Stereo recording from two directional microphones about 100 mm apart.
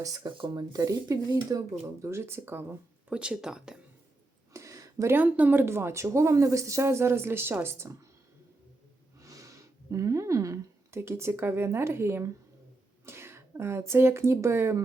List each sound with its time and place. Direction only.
0.0 s speech: 35° right (ahead or behind)
0.3 s speech: 45° right (ahead or behind); by 2.7 s 25° right (ahead or behind)
3.1 s speech: 10° right (ahead or behind)
4.5 s a sound: 35° right (ahead or behind)
5.1 s speech: 20° right (ahead or behind)
9.2 s speech: 35° right (ahead or behind)